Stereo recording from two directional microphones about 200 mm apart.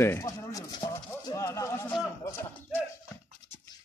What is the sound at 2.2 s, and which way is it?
Music, 10° left (ahead or behind).